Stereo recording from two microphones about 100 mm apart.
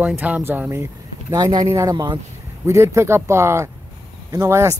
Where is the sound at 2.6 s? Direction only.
30° right (ahead or behind).